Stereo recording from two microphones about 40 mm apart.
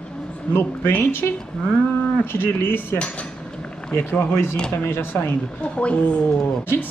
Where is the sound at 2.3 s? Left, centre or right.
Left.